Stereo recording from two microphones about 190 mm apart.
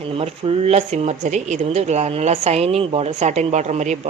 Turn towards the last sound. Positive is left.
turn(degrees=-40)  # may be behind; listen again after turning